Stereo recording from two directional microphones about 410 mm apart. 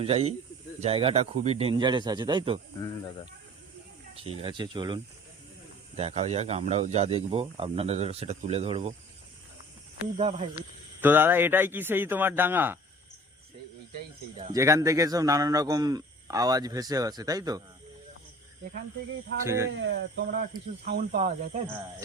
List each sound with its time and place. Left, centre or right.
0.0 s speech: centre
4.2 s speech: centre
6.0 s speech: centre
10.2 s speech: centre
11.0 s a man's voice: centre
14.3 s speech: centre
19.5 s speech: centre
19.8 s speech: right